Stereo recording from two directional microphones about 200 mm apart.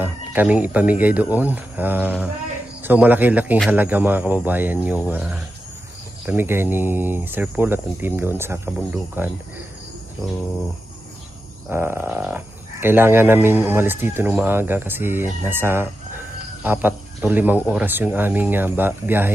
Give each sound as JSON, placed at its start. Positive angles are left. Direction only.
{"t": 0.0, "sound": "speech", "side_deg": -10}
{"t": 11.7, "sound": "speech", "side_deg": -10}